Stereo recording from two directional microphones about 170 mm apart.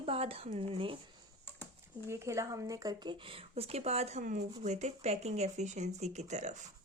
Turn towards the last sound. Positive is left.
turn(degrees=-45)  # may be behind; listen again after turning